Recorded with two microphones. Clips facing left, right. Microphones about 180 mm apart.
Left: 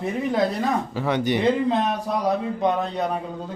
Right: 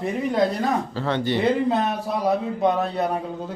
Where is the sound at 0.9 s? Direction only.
15° left (ahead or behind).